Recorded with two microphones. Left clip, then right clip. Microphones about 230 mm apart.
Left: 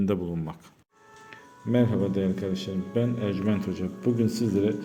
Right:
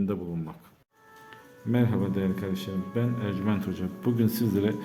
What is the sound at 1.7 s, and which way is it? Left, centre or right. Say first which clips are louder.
A man's voice: left 3 dB; centre.